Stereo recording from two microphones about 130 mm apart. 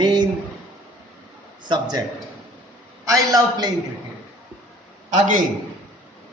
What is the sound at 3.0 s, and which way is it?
Speech, 25° right (ahead or behind).